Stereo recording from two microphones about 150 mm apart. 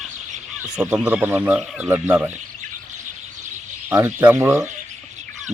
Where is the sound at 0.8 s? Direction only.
5° right (ahead or behind).